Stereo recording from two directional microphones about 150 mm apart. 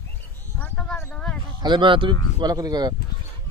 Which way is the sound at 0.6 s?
10° left (ahead or behind).